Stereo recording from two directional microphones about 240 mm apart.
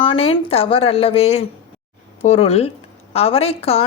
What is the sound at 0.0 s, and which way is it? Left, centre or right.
A woman's voice, left.